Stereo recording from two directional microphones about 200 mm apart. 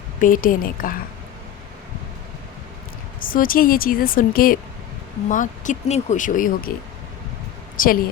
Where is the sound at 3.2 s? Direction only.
45° left (ahead or behind).